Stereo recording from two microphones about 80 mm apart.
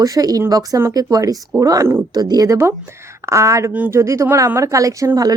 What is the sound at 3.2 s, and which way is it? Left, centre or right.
A woman's voice, right.